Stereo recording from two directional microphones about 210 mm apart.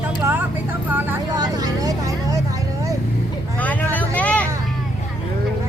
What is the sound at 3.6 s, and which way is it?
Speech, 5° left (ahead or behind).